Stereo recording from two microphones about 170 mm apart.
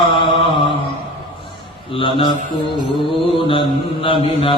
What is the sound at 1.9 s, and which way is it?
Mantra, 30° left (ahead or behind).